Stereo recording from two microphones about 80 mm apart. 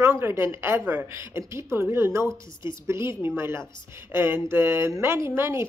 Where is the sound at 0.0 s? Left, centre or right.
Right.